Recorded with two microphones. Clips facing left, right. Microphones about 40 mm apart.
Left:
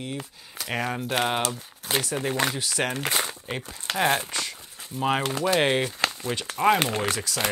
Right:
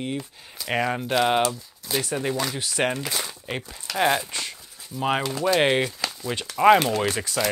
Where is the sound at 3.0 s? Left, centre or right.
Left.